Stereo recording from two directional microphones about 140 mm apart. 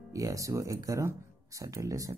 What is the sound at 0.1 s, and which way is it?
Speech, 25° right (ahead or behind).